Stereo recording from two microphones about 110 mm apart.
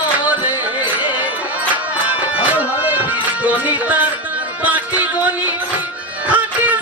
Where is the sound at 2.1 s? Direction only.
15° right (ahead or behind).